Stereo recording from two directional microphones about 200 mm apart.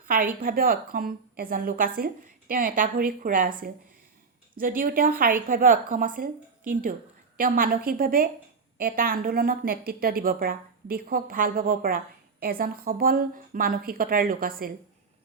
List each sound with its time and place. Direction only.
0.0 s a woman's voice: 45° right (ahead or behind)
4.5 s a woman's voice: 45° right (ahead or behind)
7.3 s a woman's voice: 45° right (ahead or behind)